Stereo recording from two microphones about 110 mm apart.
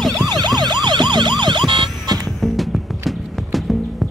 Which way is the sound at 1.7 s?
40° right (ahead or behind).